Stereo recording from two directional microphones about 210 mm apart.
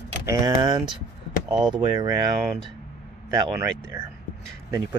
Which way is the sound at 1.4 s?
5° right (ahead or behind).